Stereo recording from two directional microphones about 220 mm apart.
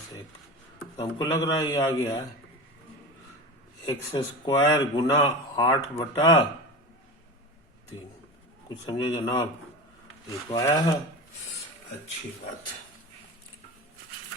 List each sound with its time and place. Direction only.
0.9 s a man's voice: 15° left (ahead or behind)
3.8 s speech: 20° left (ahead or behind)
8.9 s speech: 20° left (ahead or behind)
10.5 s a man's voice: 15° left (ahead or behind)